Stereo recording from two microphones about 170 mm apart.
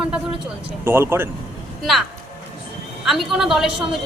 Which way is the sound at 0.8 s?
15° right (ahead or behind).